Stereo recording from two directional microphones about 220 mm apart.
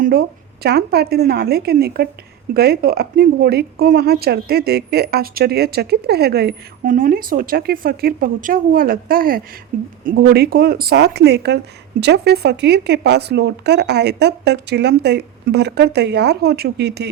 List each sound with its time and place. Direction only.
0.0 s a woman's voice: 45° right (ahead or behind)